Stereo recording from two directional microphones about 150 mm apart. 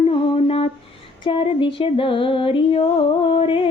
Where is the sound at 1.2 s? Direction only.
35° left (ahead or behind).